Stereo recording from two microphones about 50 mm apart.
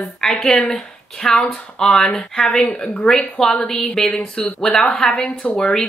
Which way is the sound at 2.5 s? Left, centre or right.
Left.